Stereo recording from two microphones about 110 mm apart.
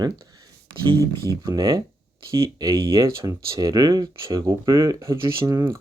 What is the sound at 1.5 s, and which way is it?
Speech, 35° right (ahead or behind).